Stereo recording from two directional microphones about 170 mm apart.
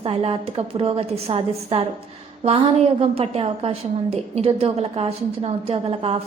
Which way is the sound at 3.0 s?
35° right (ahead or behind).